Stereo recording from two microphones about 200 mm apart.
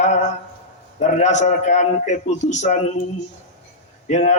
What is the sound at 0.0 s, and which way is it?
A man's voice, 35° left (ahead or behind).